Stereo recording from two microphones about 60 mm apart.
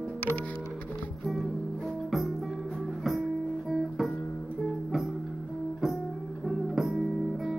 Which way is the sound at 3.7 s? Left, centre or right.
Centre.